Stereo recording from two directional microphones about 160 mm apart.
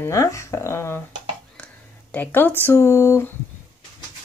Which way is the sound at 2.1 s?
10° left (ahead or behind).